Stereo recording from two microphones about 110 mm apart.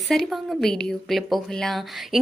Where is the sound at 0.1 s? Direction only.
5° left (ahead or behind).